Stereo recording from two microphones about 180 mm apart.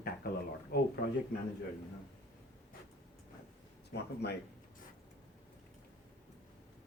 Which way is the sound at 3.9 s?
65° left (ahead or behind).